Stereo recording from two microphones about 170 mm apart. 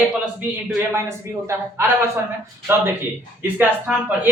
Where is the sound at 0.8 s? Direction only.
15° right (ahead or behind).